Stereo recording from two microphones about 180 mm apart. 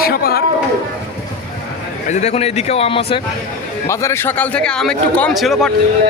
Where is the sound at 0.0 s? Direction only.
60° left (ahead or behind).